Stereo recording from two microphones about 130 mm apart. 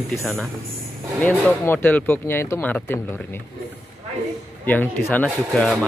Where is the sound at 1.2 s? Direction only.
15° left (ahead or behind).